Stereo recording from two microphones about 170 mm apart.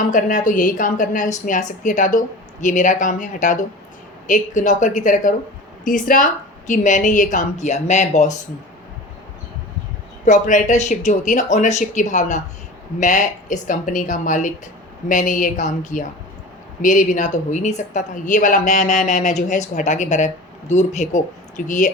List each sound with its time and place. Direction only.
0.0 s a woman's voice: 50° left (ahead or behind)
10.2 s a woman's voice: 45° left (ahead or behind)